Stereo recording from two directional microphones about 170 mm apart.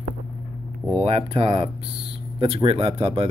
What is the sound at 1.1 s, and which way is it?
Speech, 35° right (ahead or behind).